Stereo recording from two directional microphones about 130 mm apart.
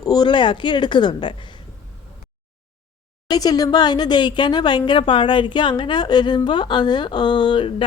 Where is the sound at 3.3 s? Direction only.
30° left (ahead or behind).